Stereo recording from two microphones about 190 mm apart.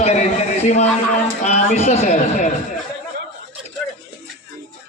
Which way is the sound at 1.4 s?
40° left (ahead or behind).